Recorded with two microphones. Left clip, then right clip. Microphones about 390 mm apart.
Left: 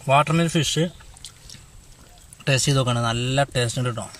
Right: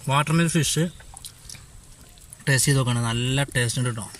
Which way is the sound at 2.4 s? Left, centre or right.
Centre.